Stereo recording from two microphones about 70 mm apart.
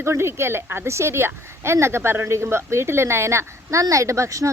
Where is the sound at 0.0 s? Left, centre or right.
Right.